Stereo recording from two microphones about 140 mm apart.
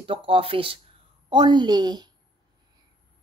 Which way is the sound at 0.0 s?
40° right (ahead or behind).